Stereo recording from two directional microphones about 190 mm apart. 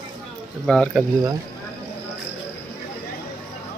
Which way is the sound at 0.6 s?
5° left (ahead or behind).